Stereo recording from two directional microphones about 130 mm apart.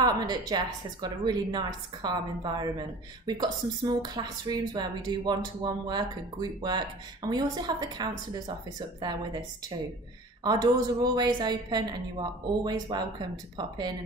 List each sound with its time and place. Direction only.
0.0 s speech: 30° right (ahead or behind)
10.4 s speech: 30° right (ahead or behind)